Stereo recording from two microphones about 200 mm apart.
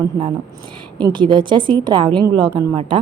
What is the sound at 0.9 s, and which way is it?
A woman's voice, 20° right (ahead or behind).